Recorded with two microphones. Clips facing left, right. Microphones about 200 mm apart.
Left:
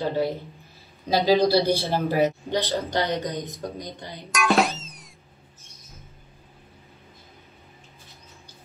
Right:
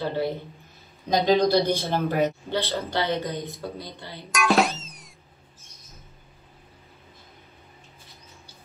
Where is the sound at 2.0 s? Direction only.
10° left (ahead or behind).